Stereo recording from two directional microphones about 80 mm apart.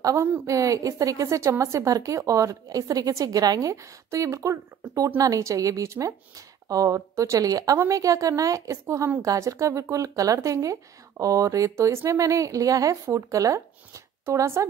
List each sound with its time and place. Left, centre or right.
0.0 s a woman's voice: right